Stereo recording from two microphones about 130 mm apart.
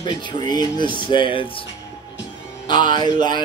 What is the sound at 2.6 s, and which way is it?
Speech, 35° left (ahead or behind).